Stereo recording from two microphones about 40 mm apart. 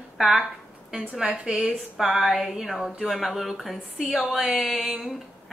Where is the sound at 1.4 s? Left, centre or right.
Right.